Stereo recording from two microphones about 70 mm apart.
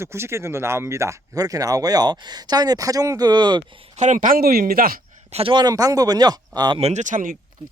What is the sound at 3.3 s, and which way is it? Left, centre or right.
Speech, right.